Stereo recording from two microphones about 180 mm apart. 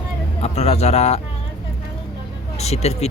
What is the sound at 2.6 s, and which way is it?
Speech, 35° left (ahead or behind).